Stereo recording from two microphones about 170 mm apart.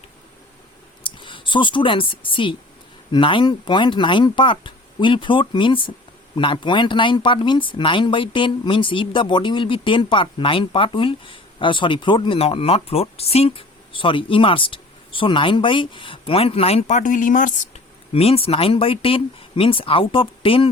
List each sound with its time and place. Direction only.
1.0 s speech: 30° left (ahead or behind); by 17.5 s 50° left (ahead or behind)
18.1 s speech: 35° left (ahead or behind)